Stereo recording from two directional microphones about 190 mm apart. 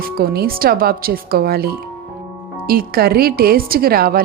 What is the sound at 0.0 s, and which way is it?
Speech, 50° right (ahead or behind).